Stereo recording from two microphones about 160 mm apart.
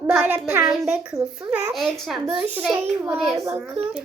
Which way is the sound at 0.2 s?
10° right (ahead or behind).